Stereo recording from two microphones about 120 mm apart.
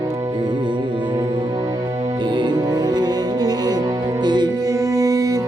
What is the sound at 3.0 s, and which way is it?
Music, 35° right (ahead or behind).